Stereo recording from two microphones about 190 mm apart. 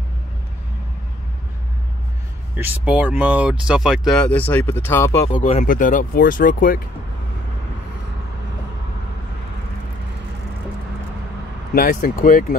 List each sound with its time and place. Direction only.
2.5 s speech: 10° right (ahead or behind); by 5.3 s 15° left (ahead or behind)
5.4 s speech: 40° left (ahead or behind)
11.7 s speech: 45° left (ahead or behind)